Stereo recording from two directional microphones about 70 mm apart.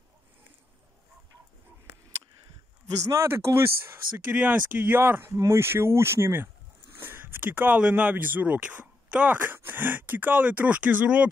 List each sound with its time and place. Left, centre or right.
3.2 s speech: right
4.3 s speech: right